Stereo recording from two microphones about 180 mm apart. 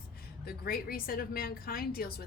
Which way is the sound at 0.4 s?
55° left (ahead or behind).